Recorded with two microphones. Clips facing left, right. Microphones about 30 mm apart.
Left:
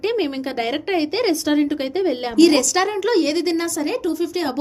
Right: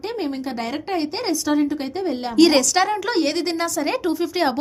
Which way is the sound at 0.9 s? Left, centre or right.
Centre.